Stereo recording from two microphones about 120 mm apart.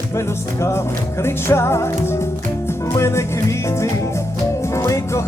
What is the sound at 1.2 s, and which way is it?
Music, 20° left (ahead or behind).